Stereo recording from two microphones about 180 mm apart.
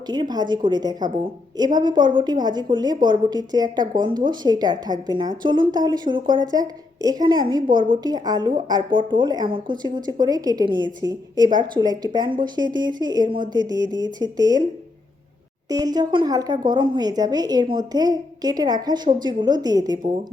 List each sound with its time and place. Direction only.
0.1 s a woman's voice: 25° right (ahead or behind)
15.7 s a woman's voice: 20° right (ahead or behind)